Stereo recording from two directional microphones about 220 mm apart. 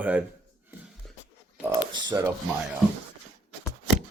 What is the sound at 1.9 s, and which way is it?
Speech, 20° right (ahead or behind).